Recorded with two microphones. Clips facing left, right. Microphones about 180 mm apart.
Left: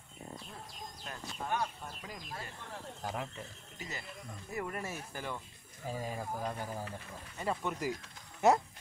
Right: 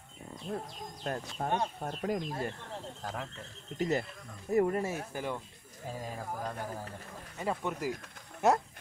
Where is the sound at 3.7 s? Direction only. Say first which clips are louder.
Right 15 dB; 55° right (ahead or behind).